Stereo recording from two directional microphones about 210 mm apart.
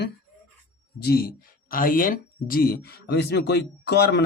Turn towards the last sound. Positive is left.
turn(degrees=50)  # may be behind; listen again after turning